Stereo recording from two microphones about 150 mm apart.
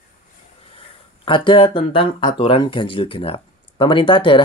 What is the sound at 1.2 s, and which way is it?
Speech, 35° left (ahead or behind).